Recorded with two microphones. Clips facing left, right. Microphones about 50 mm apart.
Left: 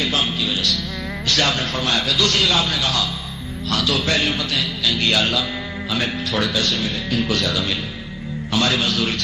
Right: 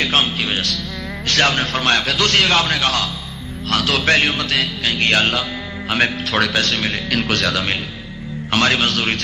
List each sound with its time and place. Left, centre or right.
0.0 s music: right
1.3 s speech: right